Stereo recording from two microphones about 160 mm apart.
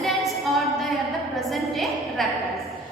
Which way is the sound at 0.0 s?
Centre (ahead or behind).